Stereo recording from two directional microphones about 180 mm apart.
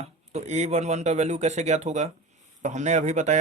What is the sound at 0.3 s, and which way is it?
Speech, 40° right (ahead or behind).